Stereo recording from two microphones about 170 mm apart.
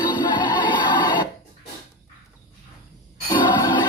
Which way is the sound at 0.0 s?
25° left (ahead or behind).